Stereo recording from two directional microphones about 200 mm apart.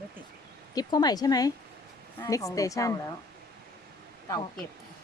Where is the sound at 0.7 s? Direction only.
20° left (ahead or behind).